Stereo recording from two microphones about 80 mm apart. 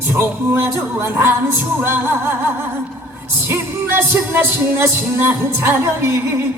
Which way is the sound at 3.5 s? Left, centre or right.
Right.